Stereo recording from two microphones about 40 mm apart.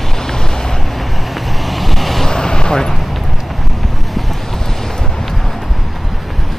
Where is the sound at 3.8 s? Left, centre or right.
Centre.